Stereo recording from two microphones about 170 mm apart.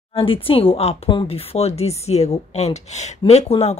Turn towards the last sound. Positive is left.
turn(degrees=35)  # may be behind; listen again after turning